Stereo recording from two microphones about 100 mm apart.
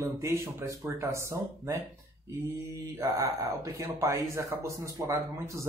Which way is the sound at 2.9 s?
30° right (ahead or behind).